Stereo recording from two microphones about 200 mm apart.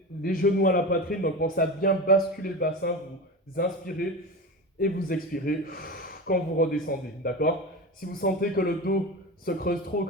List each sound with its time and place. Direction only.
0.2 s a man's voice: 45° left (ahead or behind)